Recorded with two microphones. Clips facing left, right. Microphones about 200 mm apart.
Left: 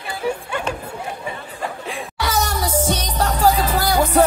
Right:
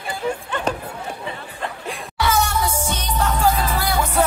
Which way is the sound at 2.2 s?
40° left (ahead or behind).